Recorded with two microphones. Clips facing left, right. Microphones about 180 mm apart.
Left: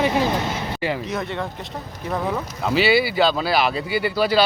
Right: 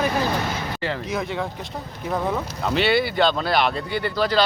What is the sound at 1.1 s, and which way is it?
A man's voice, centre (ahead or behind).